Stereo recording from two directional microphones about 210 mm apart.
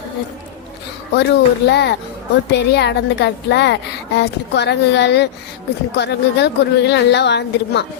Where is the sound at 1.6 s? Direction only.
50° left (ahead or behind).